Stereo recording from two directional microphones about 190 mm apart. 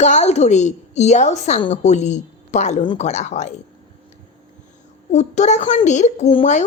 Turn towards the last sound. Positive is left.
turn(degrees=35)  # may be behind; listen again after turning